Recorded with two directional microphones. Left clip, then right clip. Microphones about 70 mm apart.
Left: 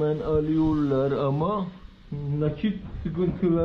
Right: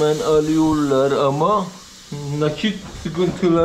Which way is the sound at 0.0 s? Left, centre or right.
Right.